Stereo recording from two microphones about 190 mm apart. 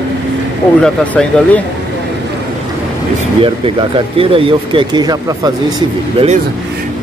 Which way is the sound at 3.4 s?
25° right (ahead or behind).